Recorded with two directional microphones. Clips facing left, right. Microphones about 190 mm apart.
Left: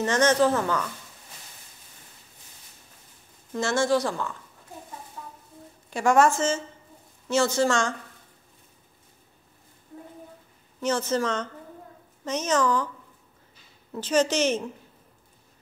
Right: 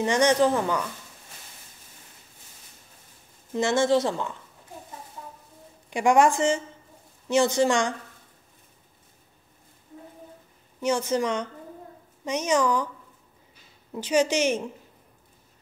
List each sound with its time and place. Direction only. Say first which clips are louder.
0.0 s a woman's voice: right 1 dB; 15° right (ahead or behind)
3.5 s a woman's voice: right 2 dB; 20° right (ahead or behind)
5.9 s a woman's voice: right 1 dB; 15° right (ahead or behind)
10.8 s a woman's voice: right 1 dB; 10° right (ahead or behind)
13.9 s a woman's voice: even; 10° right (ahead or behind)